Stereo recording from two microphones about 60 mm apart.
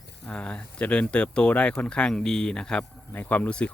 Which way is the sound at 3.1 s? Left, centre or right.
Left.